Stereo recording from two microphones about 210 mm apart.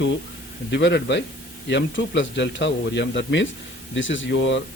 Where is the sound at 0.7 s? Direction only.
55° left (ahead or behind).